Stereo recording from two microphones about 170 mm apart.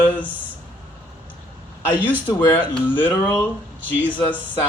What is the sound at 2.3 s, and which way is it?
Speech, 10° left (ahead or behind).